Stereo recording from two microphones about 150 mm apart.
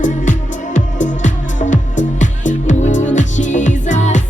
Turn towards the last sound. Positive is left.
turn(degrees=50)  # may be behind; listen again after turning